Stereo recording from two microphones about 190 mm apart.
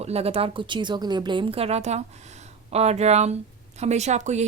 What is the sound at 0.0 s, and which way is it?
A woman's voice, 35° right (ahead or behind).